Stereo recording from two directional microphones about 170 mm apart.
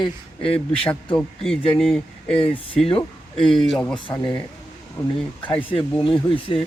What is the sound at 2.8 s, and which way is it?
Speech, 30° left (ahead or behind).